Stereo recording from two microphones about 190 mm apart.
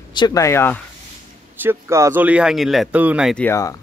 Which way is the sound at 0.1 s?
20° left (ahead or behind).